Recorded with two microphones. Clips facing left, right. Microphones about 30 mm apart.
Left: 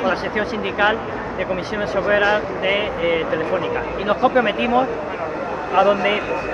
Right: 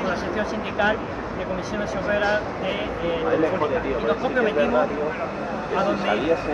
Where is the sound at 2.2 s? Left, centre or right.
Left.